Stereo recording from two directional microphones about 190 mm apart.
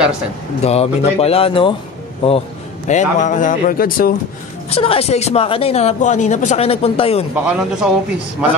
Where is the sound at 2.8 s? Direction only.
40° left (ahead or behind).